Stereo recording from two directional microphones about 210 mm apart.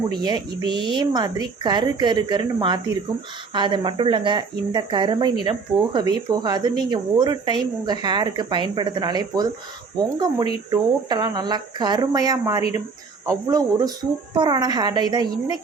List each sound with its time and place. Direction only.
0.1 s speech: 20° right (ahead or behind)